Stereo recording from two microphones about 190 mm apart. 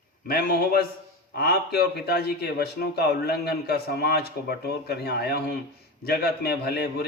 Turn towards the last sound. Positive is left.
turn(degrees=55)  # may be behind; listen again after turning